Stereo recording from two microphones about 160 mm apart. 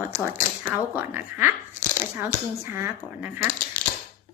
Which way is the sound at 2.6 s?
15° right (ahead or behind).